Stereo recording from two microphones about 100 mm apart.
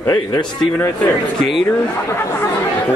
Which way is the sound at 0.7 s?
15° left (ahead or behind).